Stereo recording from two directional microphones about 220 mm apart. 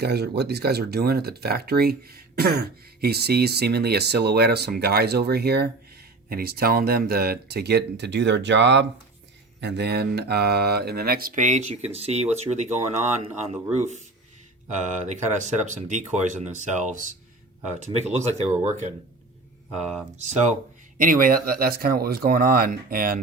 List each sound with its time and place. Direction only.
0.0 s speech: 45° right (ahead or behind); by 18.4 s 30° right (ahead or behind)
20.1 s speech: 30° right (ahead or behind)